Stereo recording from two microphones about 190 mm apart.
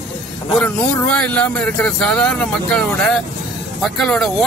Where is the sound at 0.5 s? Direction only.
5° left (ahead or behind).